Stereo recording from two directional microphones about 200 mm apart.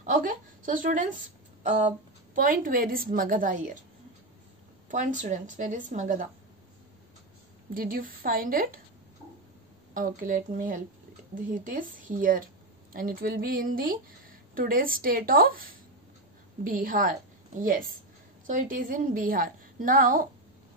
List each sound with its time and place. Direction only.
0.0 s a woman's voice: 40° right (ahead or behind)
4.9 s speech: 40° right (ahead or behind)
7.7 s a woman's voice: 45° right (ahead or behind)
9.9 s a woman's voice: 40° right (ahead or behind)